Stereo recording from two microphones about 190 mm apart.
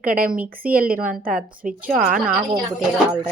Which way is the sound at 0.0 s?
45° right (ahead or behind).